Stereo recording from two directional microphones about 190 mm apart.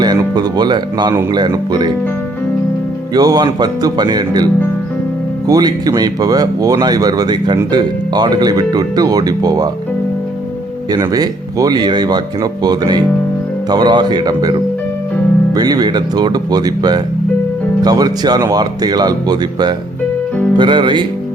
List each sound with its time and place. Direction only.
0.0 s speech: 20° right (ahead or behind)
3.2 s speech: 20° right (ahead or behind)
5.5 s speech: 20° right (ahead or behind)
10.9 s speech: 20° right (ahead or behind)